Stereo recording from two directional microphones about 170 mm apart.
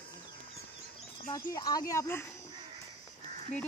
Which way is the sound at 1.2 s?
20° left (ahead or behind).